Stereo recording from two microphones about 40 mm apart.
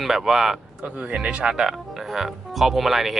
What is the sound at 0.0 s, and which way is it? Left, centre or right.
Speech, centre.